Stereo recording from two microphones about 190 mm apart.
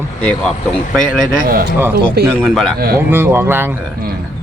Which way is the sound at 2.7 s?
50° right (ahead or behind).